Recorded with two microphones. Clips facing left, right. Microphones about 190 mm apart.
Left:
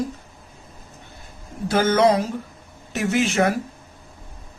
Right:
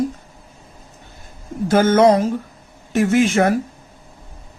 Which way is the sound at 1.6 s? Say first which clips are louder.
Right 4 dB; 50° right (ahead or behind).